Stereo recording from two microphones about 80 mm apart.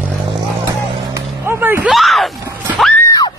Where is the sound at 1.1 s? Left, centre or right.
Right.